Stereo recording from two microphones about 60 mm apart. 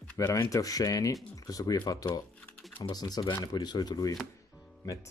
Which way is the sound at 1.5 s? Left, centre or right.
Left.